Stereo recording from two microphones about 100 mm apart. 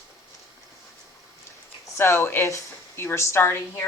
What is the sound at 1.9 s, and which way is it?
A woman's voice, 25° left (ahead or behind).